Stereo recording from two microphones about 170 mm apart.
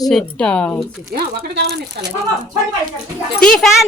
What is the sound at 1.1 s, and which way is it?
Speech, 65° right (ahead or behind).